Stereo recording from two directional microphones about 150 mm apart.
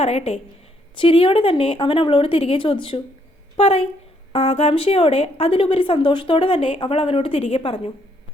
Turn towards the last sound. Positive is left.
turn(degrees=40)  # may be behind; listen again after turning